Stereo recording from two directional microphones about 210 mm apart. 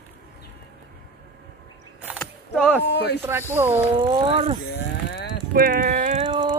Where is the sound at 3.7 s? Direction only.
30° right (ahead or behind).